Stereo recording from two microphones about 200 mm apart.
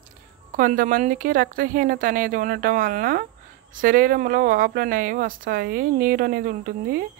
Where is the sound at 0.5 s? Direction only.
40° right (ahead or behind).